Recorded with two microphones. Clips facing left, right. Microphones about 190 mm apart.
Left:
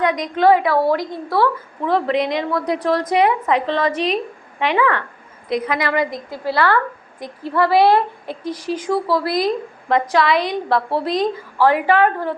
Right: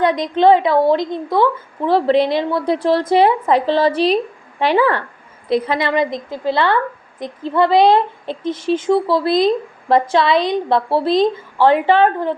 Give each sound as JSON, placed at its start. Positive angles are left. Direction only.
{"t": 0.0, "sound": "a woman's voice", "side_deg": -30}
{"t": 1.9, "sound": "a woman's voice", "side_deg": -30}